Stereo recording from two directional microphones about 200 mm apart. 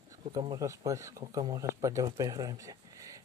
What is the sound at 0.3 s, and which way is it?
Speech, 20° right (ahead or behind).